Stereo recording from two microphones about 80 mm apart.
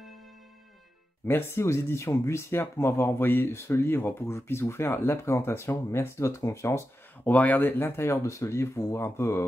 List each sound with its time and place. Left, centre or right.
1.2 s speech: left
7.2 s speech: left